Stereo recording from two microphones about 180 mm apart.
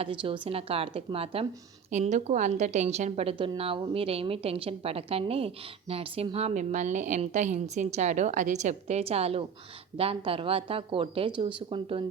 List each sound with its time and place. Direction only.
0.0 s a woman's voice: 30° right (ahead or behind)